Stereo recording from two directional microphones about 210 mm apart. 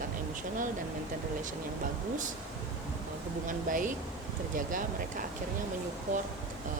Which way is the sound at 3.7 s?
40° right (ahead or behind).